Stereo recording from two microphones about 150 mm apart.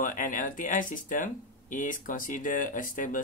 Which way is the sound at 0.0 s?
60° left (ahead or behind).